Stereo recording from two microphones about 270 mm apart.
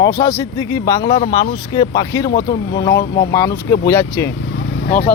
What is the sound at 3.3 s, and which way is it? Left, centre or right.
Speech, centre.